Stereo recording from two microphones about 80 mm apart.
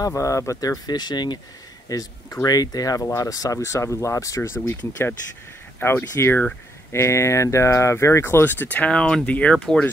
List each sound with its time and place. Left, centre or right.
0.0 s speech: left
1.9 s speech: left
4.6 s speech: left; by 9.8 s centre